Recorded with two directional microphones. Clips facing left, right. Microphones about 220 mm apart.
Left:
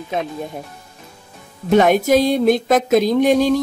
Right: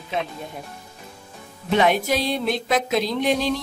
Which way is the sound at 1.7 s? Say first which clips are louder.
Left 7 dB; 45° left (ahead or behind).